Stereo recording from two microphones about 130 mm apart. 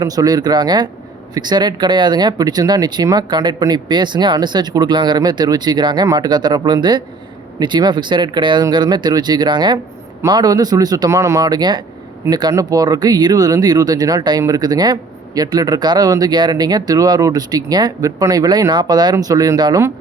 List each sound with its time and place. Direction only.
0.0 s speech: 30° right (ahead or behind)